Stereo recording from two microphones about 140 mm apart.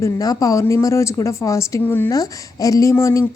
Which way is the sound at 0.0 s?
25° left (ahead or behind).